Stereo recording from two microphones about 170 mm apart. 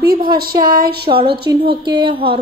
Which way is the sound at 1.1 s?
30° right (ahead or behind).